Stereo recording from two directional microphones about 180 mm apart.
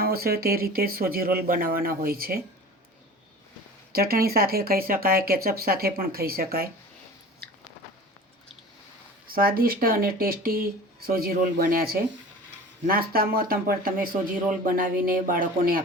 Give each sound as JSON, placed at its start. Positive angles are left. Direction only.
{"t": 0.0, "sound": "speech", "side_deg": -60}
{"t": 3.9, "sound": "speech", "side_deg": -55}
{"t": 9.2, "sound": "speech", "side_deg": -55}